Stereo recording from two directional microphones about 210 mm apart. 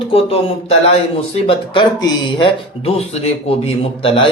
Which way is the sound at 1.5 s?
25° left (ahead or behind).